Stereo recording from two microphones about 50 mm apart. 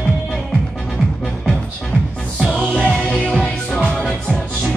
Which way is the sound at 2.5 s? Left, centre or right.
Centre.